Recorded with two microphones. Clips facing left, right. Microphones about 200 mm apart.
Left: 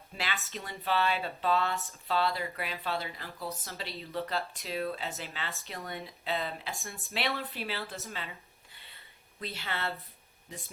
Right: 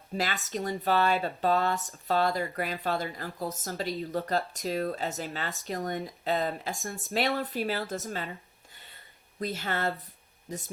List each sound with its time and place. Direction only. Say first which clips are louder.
0.1 s speech: right 7 dB; 45° right (ahead or behind)
9.4 s speech: right 6 dB; 45° right (ahead or behind)